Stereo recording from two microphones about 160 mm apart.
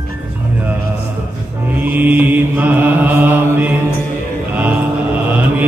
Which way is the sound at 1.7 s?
10° right (ahead or behind).